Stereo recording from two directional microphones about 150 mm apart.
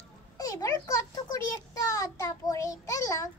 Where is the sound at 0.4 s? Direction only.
25° left (ahead or behind).